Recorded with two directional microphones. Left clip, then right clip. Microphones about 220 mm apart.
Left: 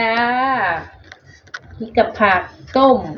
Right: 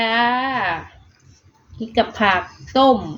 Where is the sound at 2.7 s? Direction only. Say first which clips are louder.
Left 2 dB; 15° right (ahead or behind).